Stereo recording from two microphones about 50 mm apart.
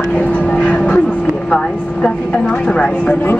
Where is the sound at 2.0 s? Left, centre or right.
Centre.